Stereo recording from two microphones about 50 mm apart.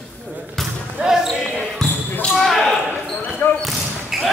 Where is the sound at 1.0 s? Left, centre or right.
Right.